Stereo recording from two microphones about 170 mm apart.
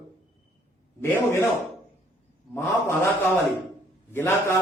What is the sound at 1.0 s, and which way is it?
Speech, 15° left (ahead or behind).